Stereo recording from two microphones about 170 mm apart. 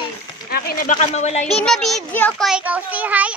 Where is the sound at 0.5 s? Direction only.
65° left (ahead or behind).